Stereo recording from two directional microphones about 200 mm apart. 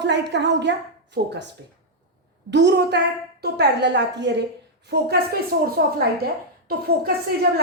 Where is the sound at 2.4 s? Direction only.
60° right (ahead or behind).